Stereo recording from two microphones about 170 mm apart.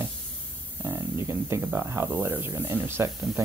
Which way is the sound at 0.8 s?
15° right (ahead or behind).